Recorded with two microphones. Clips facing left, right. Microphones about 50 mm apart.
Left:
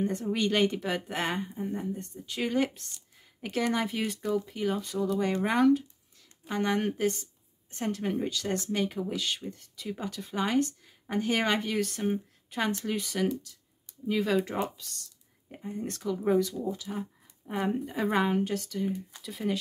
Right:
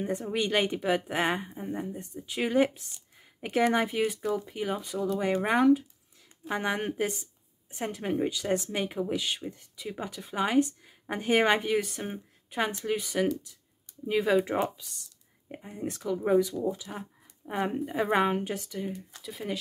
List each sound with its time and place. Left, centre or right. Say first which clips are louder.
0.0 s speech: left 1 dB; centre
3.9 s speech: right 2 dB; centre
18.9 s speech: left 4 dB; centre
19.2 s speech: left 3 dB; centre